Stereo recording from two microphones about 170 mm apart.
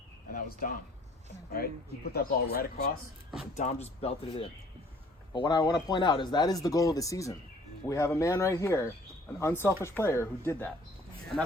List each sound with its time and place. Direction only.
0.3 s speech: 60° left (ahead or behind)
3.5 s speech: 40° left (ahead or behind)
5.3 s speech: 25° left (ahead or behind)